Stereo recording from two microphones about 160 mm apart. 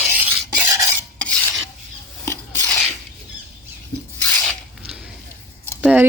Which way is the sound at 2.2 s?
15° left (ahead or behind).